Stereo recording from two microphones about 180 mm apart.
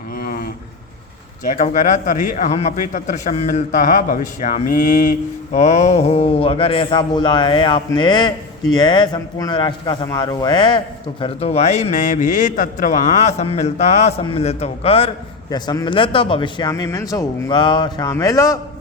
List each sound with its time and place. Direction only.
0.2 s a sound: 55° left (ahead or behind)
1.5 s a man's voice: 40° left (ahead or behind)
15.4 s speech: 20° left (ahead or behind)